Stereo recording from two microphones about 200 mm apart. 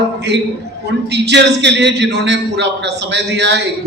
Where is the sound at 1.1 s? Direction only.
60° right (ahead or behind).